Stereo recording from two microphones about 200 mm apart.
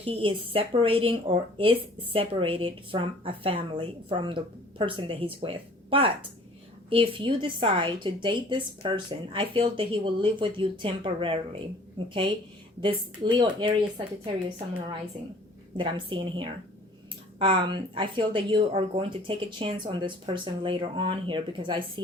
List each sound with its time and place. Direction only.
0.0 s speech: 25° right (ahead or behind)
15.8 s speech: 25° right (ahead or behind)